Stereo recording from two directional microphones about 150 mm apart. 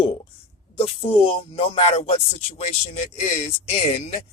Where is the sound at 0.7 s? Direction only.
40° left (ahead or behind).